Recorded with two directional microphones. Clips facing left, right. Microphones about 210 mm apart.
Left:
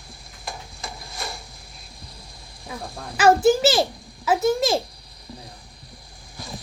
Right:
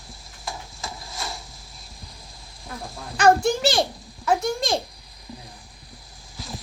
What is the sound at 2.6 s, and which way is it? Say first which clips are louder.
Goose: left 2 dB; centre (ahead or behind).